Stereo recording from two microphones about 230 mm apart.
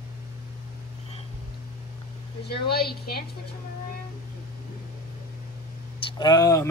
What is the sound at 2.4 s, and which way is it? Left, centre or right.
Speech, left.